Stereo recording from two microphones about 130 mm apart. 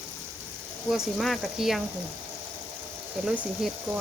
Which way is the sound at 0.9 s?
Centre (ahead or behind).